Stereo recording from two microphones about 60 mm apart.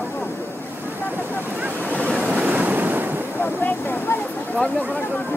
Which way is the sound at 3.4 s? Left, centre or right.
Left.